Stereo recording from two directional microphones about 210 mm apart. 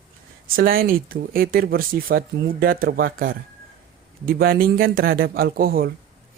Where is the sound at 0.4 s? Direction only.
45° right (ahead or behind).